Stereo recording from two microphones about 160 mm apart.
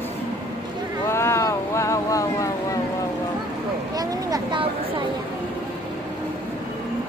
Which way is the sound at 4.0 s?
25° right (ahead or behind).